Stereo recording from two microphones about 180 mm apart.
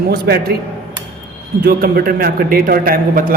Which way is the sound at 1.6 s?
55° right (ahead or behind).